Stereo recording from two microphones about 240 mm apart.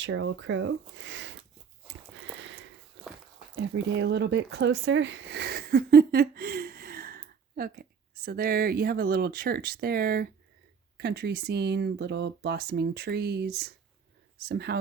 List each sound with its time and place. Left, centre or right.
0.0 s speech: right
3.5 s speech: right